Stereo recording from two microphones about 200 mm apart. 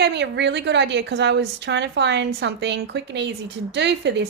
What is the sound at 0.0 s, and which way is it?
A woman's voice, 60° right (ahead or behind).